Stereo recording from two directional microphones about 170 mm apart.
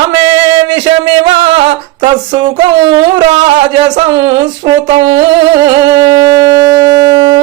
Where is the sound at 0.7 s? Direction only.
30° right (ahead or behind).